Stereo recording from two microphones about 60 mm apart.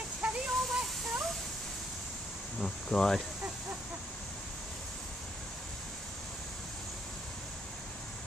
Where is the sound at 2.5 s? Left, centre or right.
Centre.